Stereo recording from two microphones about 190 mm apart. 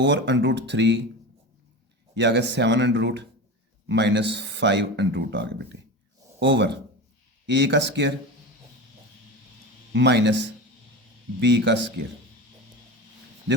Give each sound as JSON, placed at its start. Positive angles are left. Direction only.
{"t": 0.0, "sound": "a man's voice", "side_deg": -70}
{"t": 2.1, "sound": "a man's voice", "side_deg": -65}
{"t": 9.9, "sound": "a man's voice", "side_deg": -65}